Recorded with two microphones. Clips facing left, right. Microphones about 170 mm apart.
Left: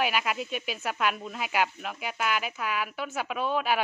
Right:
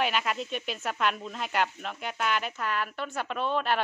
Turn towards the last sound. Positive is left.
turn(degrees=5)  # may be behind; listen again after turning